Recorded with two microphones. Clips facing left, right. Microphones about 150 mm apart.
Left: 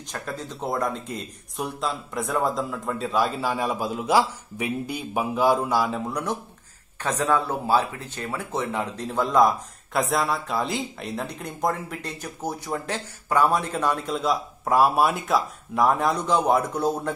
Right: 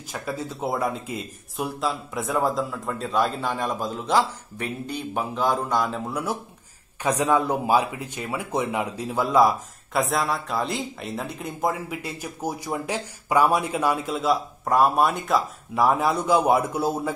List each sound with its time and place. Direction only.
0.1 s speech: 5° right (ahead or behind)